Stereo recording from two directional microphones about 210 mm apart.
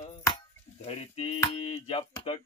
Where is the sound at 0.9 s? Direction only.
30° left (ahead or behind).